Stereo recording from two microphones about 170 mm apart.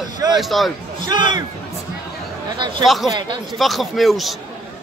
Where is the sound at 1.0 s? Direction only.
25° right (ahead or behind).